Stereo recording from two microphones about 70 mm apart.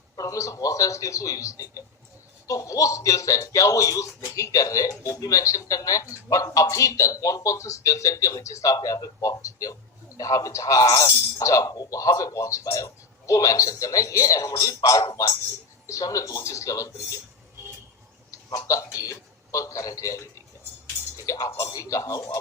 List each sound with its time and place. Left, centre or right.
0.2 s speech: left
14.8 s a man's voice: left
18.5 s speech: left
21.2 s a man's voice: left